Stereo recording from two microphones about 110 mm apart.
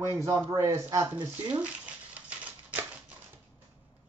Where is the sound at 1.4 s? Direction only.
10° right (ahead or behind).